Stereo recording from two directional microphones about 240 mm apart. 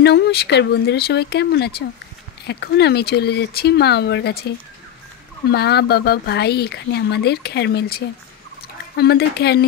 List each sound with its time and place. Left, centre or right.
0.0 s speech: left
5.5 s speech: left